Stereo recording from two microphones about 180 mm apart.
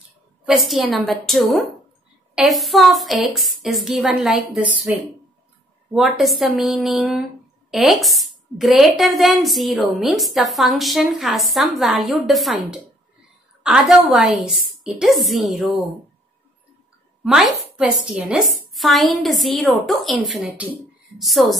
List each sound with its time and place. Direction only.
0.5 s a woman's voice: centre (ahead or behind)
5.9 s a woman's voice: centre (ahead or behind)
13.6 s a woman's voice: 5° right (ahead or behind)
17.2 s a woman's voice: 5° right (ahead or behind)